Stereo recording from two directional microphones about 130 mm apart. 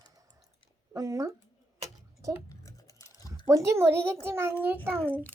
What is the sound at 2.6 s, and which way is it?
Typing, 25° left (ahead or behind).